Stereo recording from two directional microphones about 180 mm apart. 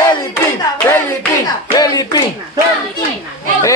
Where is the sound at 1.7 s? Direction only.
20° left (ahead or behind).